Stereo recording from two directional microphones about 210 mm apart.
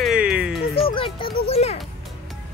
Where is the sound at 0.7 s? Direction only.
25° left (ahead or behind).